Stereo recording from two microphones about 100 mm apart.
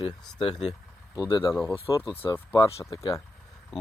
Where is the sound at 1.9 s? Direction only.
40° left (ahead or behind).